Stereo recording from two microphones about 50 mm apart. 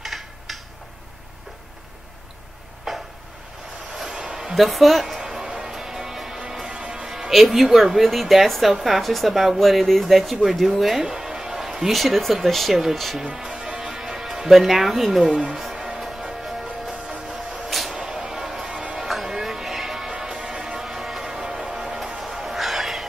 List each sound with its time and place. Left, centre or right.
0.0 s a sound: centre
2.9 s a sound: centre
4.0 s a sound: centre
4.6 s music: centre
7.1 s speech: centre
13.2 s music: centre
15.3 s speech: centre
15.6 s music: centre
17.6 s vehicle: centre
17.9 s music: centre
18.9 s music: centre
20.1 s music: centre
22.2 s a sound: centre